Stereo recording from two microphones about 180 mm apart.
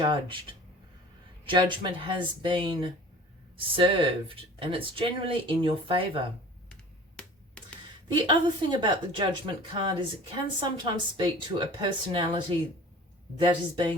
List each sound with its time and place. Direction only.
0.0 s speech: 30° right (ahead or behind)
7.2 s finger snapping: 5° left (ahead or behind)
8.0 s speech: 25° right (ahead or behind)